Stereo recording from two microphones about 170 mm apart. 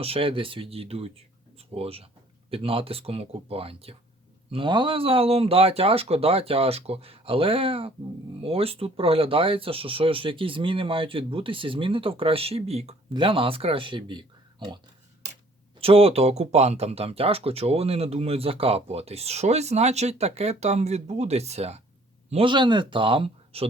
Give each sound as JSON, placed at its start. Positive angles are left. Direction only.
{"t": 0.0, "sound": "speech", "side_deg": -35}
{"t": 15.8, "sound": "speech", "side_deg": -35}